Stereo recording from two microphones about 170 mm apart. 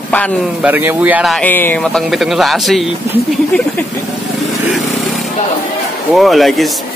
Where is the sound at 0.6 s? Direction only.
10° right (ahead or behind).